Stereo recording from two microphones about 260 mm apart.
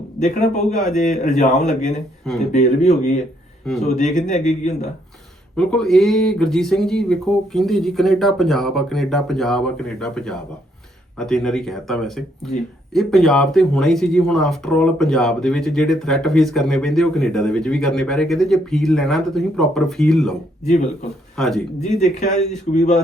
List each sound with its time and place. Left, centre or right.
0.2 s a man's voice: left
2.5 s a man's voice: left
5.5 s speech: centre
21.3 s speech: centre
21.8 s a man's voice: left